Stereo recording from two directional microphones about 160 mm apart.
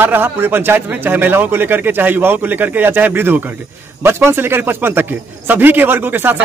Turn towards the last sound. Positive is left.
turn(degrees=-10)  # may be behind; listen again after turning